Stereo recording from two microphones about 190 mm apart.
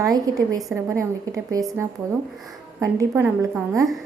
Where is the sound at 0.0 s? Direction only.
20° right (ahead or behind).